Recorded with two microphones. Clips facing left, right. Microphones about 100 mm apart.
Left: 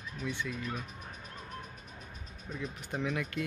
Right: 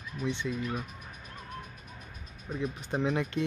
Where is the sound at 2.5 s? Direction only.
25° right (ahead or behind).